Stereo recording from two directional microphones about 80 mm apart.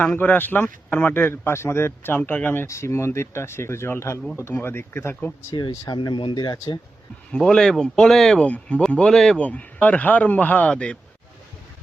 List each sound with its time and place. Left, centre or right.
0.0 s speech: left
2.6 s speech: left
5.9 s speech: left
7.3 s speech: centre
8.4 s speech: centre
9.4 s speech: centre